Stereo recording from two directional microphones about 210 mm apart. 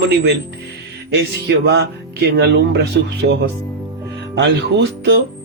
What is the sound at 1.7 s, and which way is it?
Speech, 55° right (ahead or behind).